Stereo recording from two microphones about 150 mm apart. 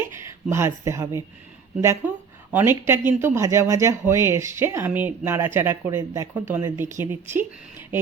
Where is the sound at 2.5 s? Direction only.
15° right (ahead or behind).